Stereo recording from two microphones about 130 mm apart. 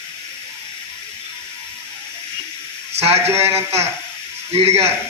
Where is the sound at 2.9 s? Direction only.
55° right (ahead or behind).